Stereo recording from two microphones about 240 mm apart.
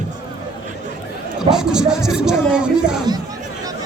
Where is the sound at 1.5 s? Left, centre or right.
Centre.